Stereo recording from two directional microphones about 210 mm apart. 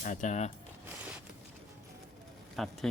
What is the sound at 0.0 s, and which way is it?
Speech, 35° left (ahead or behind).